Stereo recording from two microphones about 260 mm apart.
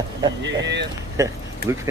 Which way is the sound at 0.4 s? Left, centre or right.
Right.